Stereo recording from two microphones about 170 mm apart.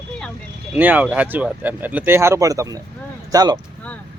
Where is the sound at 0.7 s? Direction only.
10° right (ahead or behind).